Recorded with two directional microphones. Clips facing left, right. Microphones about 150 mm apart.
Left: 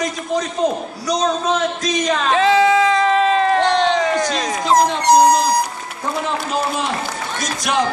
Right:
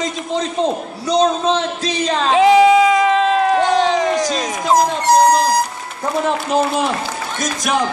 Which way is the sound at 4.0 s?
20° right (ahead or behind).